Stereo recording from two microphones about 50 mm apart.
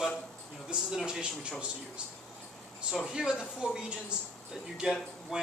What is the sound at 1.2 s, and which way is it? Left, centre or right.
Speech, centre.